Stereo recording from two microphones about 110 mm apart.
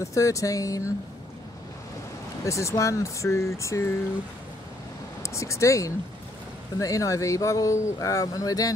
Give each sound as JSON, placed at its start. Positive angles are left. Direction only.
{"t": 0.0, "sound": "speech", "side_deg": 30}
{"t": 2.4, "sound": "a sound", "side_deg": 30}
{"t": 5.2, "sound": "speech", "side_deg": 25}